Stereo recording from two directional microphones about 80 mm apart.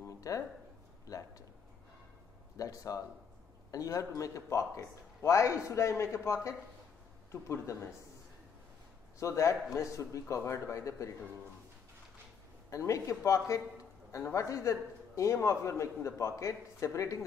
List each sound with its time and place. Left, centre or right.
0.3 s speech: left
2.5 s a man's voice: left
9.2 s a man's voice: left
12.6 s a man's voice: left